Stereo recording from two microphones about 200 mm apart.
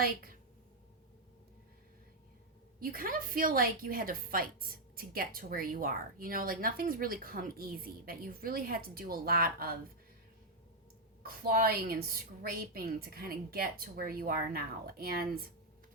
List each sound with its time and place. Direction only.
0.0 s a woman's voice: 45° right (ahead or behind)
2.8 s a woman's voice: 45° right (ahead or behind)
11.2 s a woman's voice: 45° right (ahead or behind)